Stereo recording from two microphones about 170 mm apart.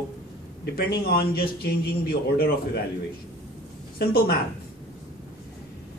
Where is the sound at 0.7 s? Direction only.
65° left (ahead or behind).